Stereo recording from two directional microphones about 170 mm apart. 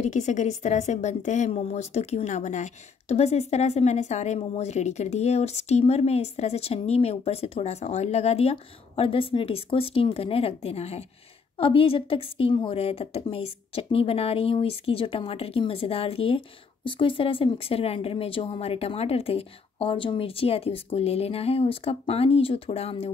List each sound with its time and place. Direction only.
0.1 s speech: 45° left (ahead or behind)